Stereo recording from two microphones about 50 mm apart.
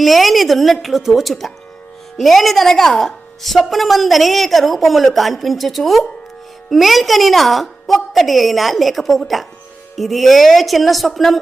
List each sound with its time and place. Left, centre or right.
0.0 s a woman's voice: centre